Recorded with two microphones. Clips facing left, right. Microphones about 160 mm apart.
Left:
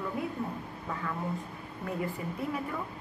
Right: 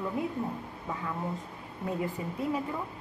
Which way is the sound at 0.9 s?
15° right (ahead or behind).